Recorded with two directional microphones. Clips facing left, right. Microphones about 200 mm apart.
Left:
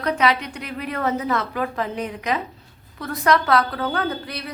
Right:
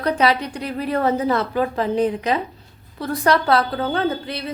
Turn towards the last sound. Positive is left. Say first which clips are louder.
# right 4 dB
turn(degrees=-25)  # may be behind; listen again after turning